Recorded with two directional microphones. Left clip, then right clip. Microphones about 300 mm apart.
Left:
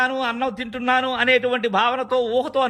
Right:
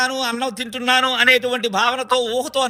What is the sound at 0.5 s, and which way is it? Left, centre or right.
Speech, right.